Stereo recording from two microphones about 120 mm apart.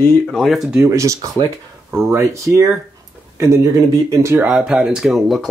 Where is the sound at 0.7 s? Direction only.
25° right (ahead or behind).